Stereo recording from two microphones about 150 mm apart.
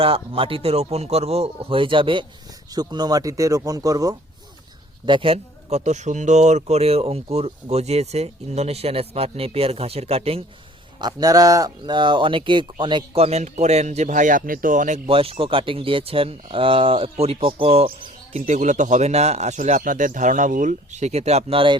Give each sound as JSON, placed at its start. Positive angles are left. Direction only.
{"t": 0.0, "sound": "a man's voice", "side_deg": -35}
{"t": 5.0, "sound": "speech", "side_deg": -35}
{"t": 11.0, "sound": "a man's voice", "side_deg": -25}
{"t": 18.3, "sound": "speech", "side_deg": -55}